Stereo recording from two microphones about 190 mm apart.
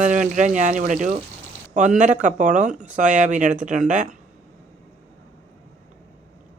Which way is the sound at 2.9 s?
40° right (ahead or behind).